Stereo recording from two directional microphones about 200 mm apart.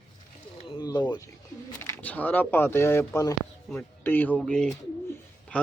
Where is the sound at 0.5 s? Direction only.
25° left (ahead or behind).